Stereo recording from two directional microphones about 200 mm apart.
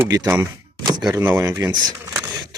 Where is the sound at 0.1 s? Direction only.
15° right (ahead or behind).